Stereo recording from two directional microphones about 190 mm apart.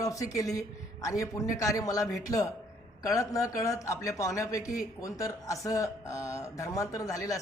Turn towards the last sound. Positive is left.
turn(degrees=15)  # may be behind; listen again after turning